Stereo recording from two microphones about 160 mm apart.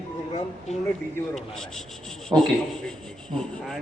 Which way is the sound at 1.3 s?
Centre (ahead or behind).